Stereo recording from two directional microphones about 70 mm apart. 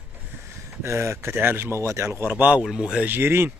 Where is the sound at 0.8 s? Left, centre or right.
Right.